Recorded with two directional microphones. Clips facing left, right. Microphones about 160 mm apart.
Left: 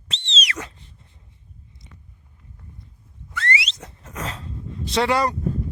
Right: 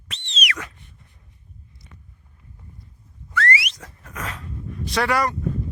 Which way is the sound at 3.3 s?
20° left (ahead or behind).